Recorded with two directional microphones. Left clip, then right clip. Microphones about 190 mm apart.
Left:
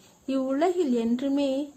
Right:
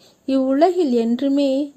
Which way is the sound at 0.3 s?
30° right (ahead or behind).